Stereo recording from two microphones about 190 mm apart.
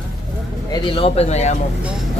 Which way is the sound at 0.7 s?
30° left (ahead or behind).